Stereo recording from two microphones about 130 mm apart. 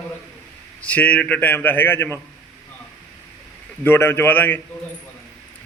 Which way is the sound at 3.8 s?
15° left (ahead or behind).